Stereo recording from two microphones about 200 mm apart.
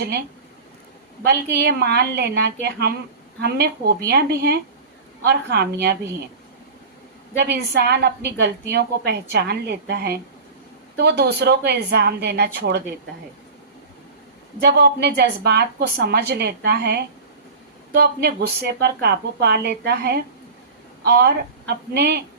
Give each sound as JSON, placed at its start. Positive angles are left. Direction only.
{"t": 1.2, "sound": "a woman's voice", "side_deg": -55}
{"t": 7.3, "sound": "a woman's voice", "side_deg": -55}
{"t": 14.6, "sound": "a woman's voice", "side_deg": -55}